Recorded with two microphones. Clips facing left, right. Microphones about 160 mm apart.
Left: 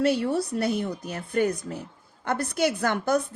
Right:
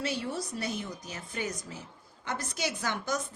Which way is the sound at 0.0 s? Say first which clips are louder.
Left 10 dB; 60° left (ahead or behind).